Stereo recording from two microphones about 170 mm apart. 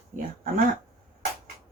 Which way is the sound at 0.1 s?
50° right (ahead or behind).